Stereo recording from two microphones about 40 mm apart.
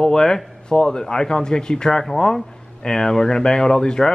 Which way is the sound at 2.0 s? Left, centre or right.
Centre.